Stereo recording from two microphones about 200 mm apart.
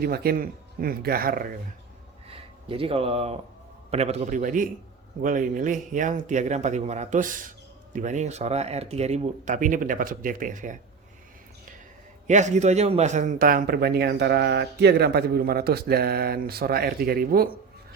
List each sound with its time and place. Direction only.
0.0 s a man's voice: 50° right (ahead or behind)
2.2 s a sound: 30° right (ahead or behind)
3.9 s speech: 30° right (ahead or behind)
12.3 s a man's voice: 35° right (ahead or behind)